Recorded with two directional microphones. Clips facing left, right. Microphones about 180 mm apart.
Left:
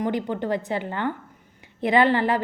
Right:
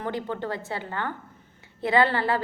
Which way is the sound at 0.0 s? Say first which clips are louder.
Left 5 dB; 15° left (ahead or behind).